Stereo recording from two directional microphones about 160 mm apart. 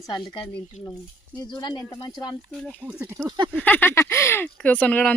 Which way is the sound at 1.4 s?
25° left (ahead or behind).